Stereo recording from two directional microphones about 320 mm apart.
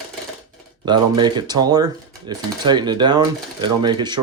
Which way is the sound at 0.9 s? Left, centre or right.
Centre.